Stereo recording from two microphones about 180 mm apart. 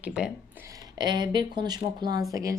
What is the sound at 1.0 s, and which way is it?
Speech, 25° right (ahead or behind).